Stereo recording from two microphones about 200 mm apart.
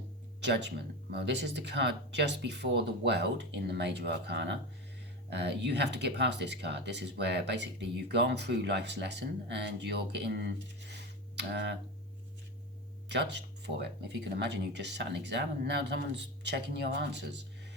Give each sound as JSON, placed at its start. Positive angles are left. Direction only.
{"t": 0.4, "sound": "speech", "side_deg": -60}
{"t": 10.8, "sound": "a sound", "side_deg": -60}
{"t": 13.1, "sound": "speech", "side_deg": -60}